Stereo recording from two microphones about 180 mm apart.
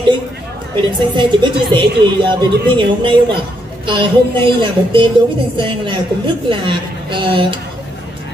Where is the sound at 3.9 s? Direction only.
25° right (ahead or behind).